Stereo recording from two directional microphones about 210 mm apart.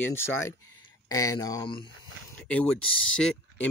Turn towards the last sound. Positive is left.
turn(degrees=5)  # may be behind; listen again after turning